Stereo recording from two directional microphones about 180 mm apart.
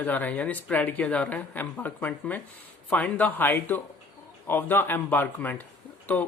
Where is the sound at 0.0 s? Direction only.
10° left (ahead or behind).